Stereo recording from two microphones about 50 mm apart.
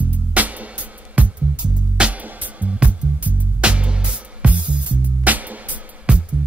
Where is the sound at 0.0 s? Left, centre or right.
Right.